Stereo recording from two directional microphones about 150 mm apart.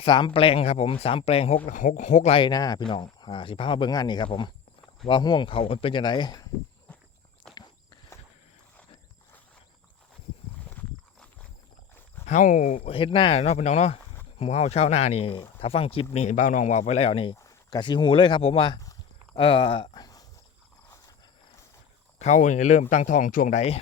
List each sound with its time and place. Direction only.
0.0 s speech: 35° left (ahead or behind)
1.6 s speech: 60° left (ahead or behind)
2.4 s speech: 25° left (ahead or behind)
12.2 s speech: 55° left (ahead or behind)
12.9 s speech: 35° left (ahead or behind)
16.1 s speech: 55° left (ahead or behind); by 17.3 s 40° left (ahead or behind)
17.3 s speech: 25° left (ahead or behind)
22.2 s speech: 55° left (ahead or behind)